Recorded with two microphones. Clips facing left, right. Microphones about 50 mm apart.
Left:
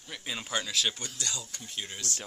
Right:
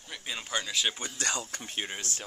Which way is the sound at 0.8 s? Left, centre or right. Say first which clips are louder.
Right 1 dB; centre.